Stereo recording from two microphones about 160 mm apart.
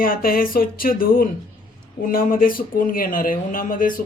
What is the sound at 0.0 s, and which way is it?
Speech, 65° left (ahead or behind).